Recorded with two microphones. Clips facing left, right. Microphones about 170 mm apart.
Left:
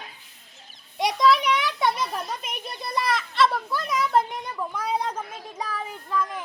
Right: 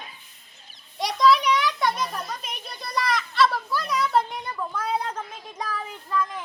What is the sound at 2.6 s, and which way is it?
Children playing, 25° left (ahead or behind).